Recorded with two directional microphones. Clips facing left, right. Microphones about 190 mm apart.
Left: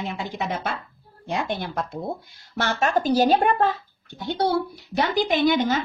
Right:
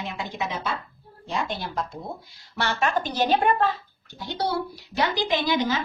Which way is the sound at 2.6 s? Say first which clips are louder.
Left 3 dB; 45° left (ahead or behind).